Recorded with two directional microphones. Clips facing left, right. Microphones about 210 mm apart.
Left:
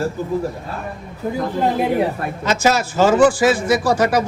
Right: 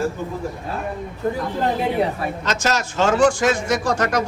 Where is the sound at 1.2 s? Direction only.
5° left (ahead or behind).